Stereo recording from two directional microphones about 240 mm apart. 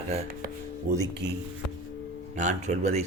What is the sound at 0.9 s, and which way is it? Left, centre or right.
Speech, right.